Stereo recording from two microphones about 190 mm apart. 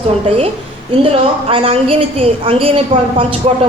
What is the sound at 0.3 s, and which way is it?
A woman's voice, 30° right (ahead or behind).